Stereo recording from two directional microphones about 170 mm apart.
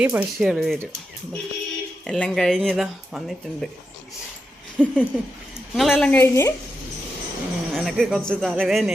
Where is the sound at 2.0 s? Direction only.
5° left (ahead or behind).